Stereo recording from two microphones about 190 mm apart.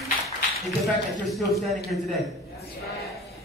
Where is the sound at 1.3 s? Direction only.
Centre (ahead or behind).